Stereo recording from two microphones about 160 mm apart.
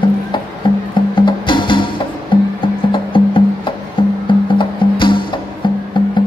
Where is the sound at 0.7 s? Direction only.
30° left (ahead or behind).